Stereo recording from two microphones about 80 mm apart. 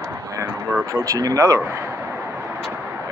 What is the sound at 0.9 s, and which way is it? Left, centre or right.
Speech, right.